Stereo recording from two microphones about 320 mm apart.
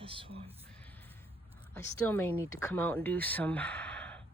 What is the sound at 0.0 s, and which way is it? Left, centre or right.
Speech, centre.